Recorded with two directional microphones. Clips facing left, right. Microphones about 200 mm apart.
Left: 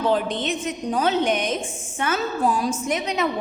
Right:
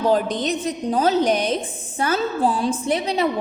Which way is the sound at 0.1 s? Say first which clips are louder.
Right 3 dB; 40° right (ahead or behind).